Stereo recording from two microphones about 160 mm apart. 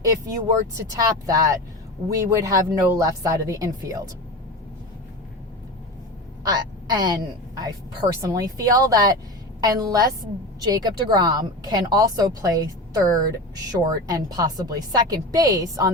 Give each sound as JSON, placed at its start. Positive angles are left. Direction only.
{"t": 0.0, "sound": "speech", "side_deg": -20}
{"t": 6.5, "sound": "a woman's voice", "side_deg": -25}
{"t": 8.2, "sound": "speech", "side_deg": -20}